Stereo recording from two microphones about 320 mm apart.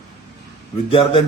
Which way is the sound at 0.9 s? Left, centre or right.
Centre.